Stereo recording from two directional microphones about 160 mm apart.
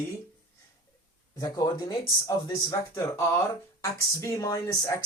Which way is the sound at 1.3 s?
20° left (ahead or behind).